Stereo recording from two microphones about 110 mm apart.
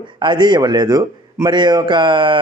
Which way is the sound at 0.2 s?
45° right (ahead or behind).